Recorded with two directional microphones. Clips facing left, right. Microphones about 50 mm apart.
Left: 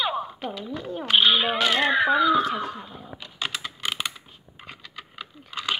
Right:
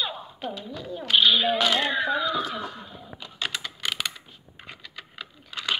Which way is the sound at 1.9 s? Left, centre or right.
Left.